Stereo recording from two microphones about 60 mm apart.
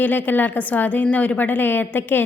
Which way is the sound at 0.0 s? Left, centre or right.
Left.